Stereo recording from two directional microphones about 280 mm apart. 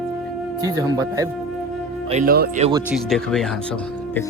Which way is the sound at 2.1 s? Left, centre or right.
Right.